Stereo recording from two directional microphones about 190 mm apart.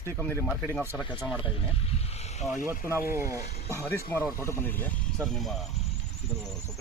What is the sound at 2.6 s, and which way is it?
Speech, 15° right (ahead or behind).